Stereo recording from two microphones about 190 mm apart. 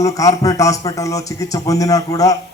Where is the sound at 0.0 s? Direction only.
20° left (ahead or behind).